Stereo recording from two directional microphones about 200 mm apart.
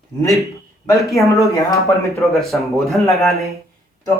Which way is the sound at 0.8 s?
15° left (ahead or behind).